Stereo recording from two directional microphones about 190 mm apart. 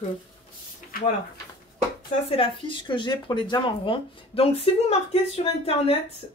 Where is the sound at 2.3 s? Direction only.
25° left (ahead or behind).